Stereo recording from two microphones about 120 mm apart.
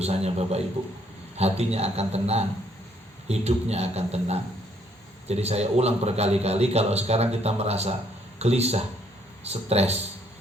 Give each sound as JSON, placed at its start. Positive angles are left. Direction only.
{"t": 0.0, "sound": "a man's voice", "side_deg": -60}